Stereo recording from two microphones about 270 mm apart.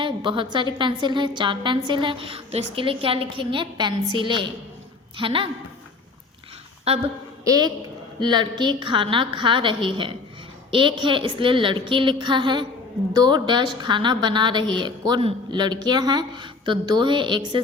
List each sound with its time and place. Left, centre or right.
0.0 s a woman's voice: centre
6.9 s a woman's voice: right